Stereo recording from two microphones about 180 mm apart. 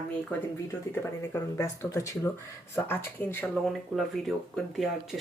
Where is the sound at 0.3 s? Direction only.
15° left (ahead or behind).